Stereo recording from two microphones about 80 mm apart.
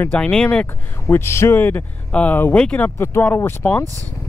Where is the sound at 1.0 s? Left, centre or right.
Left.